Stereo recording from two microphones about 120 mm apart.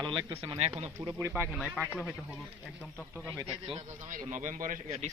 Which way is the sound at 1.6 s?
10° left (ahead or behind).